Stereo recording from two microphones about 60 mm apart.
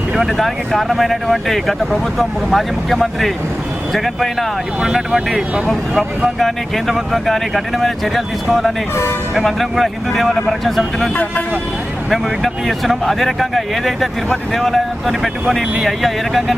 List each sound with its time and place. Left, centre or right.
0.2 s speech: centre
12.1 s speech: centre